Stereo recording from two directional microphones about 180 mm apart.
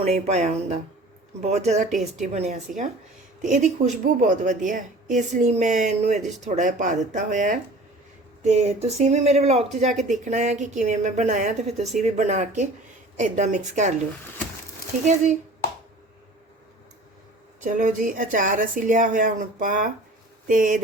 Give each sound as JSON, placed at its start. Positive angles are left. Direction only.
{"t": 0.0, "sound": "a woman's voice", "side_deg": -35}
{"t": 14.9, "sound": "a woman's voice", "side_deg": -45}
{"t": 17.6, "sound": "a woman's voice", "side_deg": -45}